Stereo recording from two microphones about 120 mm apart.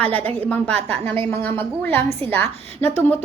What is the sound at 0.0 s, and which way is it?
A woman's voice, 15° left (ahead or behind).